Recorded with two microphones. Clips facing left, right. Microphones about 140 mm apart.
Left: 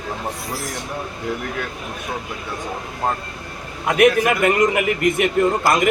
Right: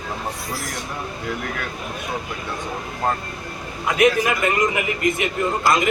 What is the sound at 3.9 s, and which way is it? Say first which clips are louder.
A man's voice: left 3 dB; 60° left (ahead or behind).